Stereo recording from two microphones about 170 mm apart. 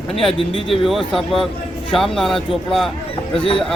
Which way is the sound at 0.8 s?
Centre (ahead or behind).